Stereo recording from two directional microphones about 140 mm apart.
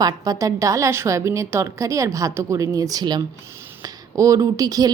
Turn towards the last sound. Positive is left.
turn(degrees=-25)  # may be behind; listen again after turning